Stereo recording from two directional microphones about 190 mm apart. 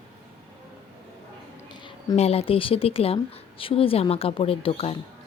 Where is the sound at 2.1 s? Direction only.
30° left (ahead or behind).